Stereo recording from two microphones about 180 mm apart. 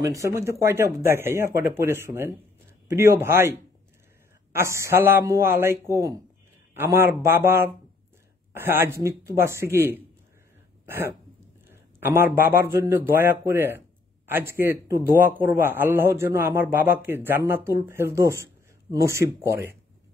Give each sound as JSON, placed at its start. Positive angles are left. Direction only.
{"t": 0.0, "sound": "a man's voice", "side_deg": -15}